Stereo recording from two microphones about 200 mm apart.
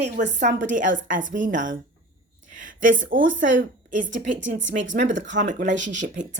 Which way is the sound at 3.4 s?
40° right (ahead or behind).